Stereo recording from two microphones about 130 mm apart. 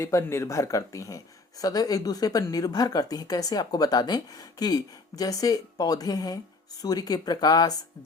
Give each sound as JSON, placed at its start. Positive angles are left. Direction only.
{"t": 0.0, "sound": "speech", "side_deg": 20}